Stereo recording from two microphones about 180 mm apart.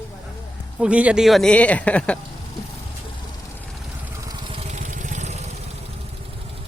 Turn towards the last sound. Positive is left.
turn(degrees=-40)  # may be behind; listen again after turning